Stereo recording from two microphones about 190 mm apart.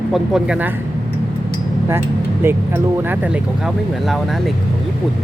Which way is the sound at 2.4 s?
10° right (ahead or behind).